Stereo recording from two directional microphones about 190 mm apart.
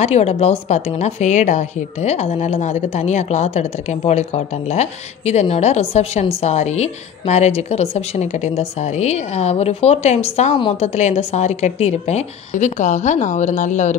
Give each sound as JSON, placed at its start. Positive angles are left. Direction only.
{"t": 0.0, "sound": "a woman's voice", "side_deg": 35}